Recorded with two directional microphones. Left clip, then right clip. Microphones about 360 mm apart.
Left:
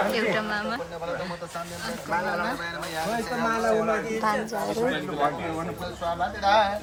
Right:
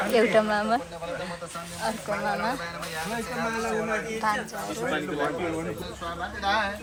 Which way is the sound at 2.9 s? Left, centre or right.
Left.